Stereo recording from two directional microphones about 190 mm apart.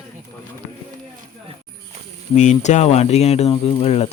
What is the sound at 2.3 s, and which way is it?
Speech, 40° left (ahead or behind).